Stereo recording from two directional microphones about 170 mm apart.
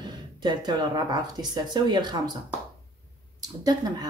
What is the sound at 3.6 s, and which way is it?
Speech, 20° right (ahead or behind).